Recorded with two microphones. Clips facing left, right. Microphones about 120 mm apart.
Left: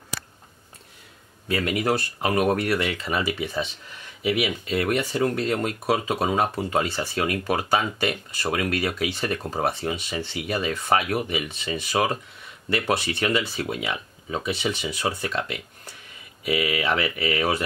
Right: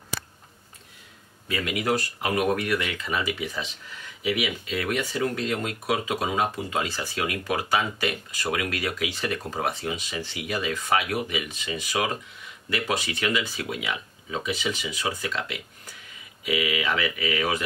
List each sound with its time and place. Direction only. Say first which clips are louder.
1.5 s speech: left 3 dB; 40° left (ahead or behind)